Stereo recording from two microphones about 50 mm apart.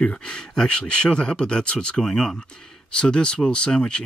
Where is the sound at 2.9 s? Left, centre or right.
Centre.